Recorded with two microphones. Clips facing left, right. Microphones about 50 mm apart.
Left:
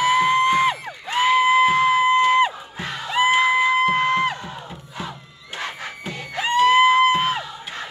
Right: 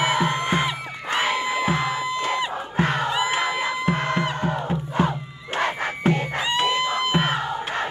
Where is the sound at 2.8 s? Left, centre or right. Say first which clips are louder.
Right 7 dB; right.